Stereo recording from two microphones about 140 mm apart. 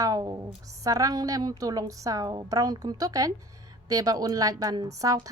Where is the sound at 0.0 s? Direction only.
25° right (ahead or behind).